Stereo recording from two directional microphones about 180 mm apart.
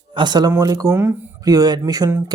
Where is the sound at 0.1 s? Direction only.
25° right (ahead or behind).